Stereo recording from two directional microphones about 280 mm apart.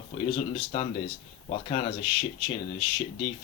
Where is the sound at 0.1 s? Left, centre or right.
Centre.